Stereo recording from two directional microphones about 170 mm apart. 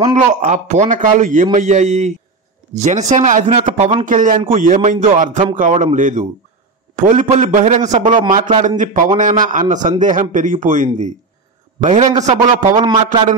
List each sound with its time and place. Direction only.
0.0 s a man's voice: 45° right (ahead or behind)
12.8 s a man's voice: 30° right (ahead or behind)